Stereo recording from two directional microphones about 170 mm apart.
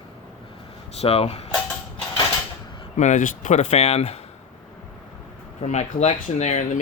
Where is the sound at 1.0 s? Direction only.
35° left (ahead or behind).